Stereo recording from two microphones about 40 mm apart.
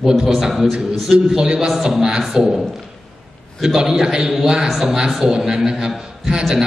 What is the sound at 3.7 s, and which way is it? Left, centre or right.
A man's voice, centre.